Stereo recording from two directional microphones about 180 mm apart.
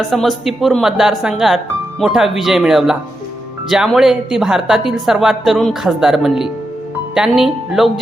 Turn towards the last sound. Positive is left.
turn(degrees=0)  # may be behind; listen again after turning